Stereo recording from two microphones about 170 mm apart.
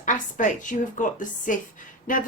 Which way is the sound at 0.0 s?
50° left (ahead or behind).